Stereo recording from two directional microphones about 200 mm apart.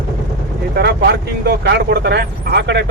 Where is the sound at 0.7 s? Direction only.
55° right (ahead or behind).